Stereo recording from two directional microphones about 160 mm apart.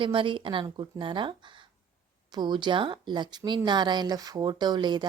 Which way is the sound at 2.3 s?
30° right (ahead or behind).